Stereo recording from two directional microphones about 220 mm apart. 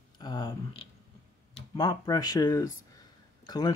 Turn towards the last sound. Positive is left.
turn(degrees=20)  # may be behind; listen again after turning